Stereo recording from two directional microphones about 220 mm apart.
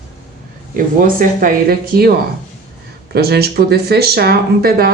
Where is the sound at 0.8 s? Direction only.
40° right (ahead or behind).